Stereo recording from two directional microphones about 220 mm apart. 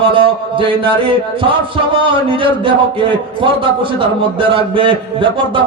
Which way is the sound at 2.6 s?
20° right (ahead or behind).